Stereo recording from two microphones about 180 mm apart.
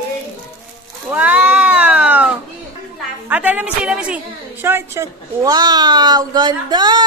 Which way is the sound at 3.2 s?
10° right (ahead or behind).